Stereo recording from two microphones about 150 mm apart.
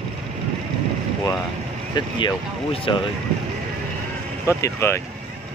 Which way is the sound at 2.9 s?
35° left (ahead or behind).